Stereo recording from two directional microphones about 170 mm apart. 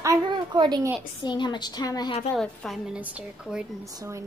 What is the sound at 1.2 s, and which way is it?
Speech, 25° left (ahead or behind).